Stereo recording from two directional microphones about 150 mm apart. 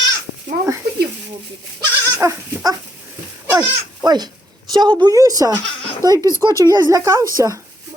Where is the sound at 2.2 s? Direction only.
20° right (ahead or behind).